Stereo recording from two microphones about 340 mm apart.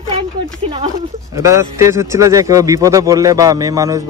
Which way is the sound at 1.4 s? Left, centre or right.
Centre.